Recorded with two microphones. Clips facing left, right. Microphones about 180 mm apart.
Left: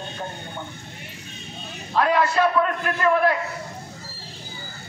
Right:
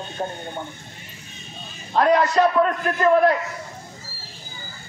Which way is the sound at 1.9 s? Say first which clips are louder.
Right 3 dB; 35° right (ahead or behind).